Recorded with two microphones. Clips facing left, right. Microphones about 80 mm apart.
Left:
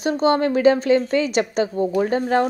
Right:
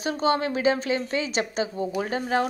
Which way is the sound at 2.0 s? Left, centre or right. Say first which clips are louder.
Left 6 dB; left.